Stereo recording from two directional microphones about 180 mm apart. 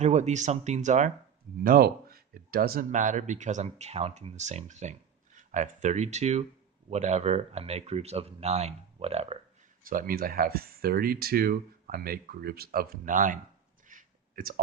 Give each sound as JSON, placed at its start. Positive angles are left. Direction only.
{"t": 0.0, "sound": "speech", "side_deg": -40}
{"t": 1.6, "sound": "speech", "side_deg": -55}
{"t": 9.8, "sound": "speech", "side_deg": -50}
{"t": 13.8, "sound": "a sound", "side_deg": -50}